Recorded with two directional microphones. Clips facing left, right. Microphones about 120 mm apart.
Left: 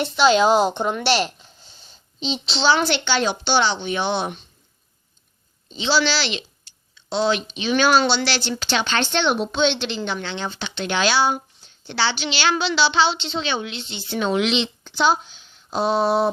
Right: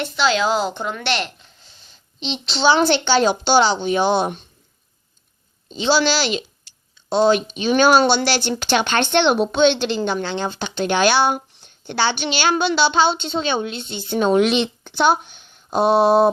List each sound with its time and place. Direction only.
0.0 s a woman's voice: 20° left (ahead or behind)
2.7 s a woman's voice: 35° right (ahead or behind)
5.7 s speech: 45° right (ahead or behind)